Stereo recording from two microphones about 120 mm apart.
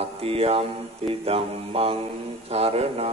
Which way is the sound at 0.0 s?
55° right (ahead or behind).